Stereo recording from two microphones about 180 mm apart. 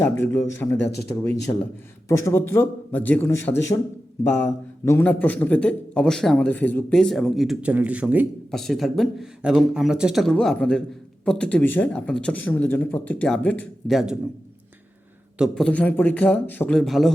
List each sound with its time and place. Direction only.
0.0 s a man's voice: 15° left (ahead or behind); by 14.2 s centre (ahead or behind)
15.4 s speech: 5° left (ahead or behind)